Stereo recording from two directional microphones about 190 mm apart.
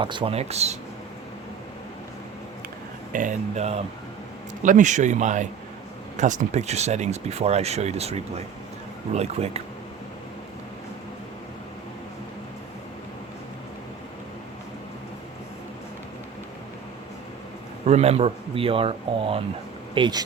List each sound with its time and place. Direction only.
0.0 s speech: 25° right (ahead or behind)
3.1 s speech: 45° right (ahead or behind)
17.8 s speech: 35° right (ahead or behind)